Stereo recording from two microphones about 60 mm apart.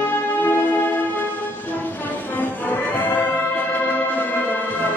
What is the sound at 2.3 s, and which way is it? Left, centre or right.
Music, left.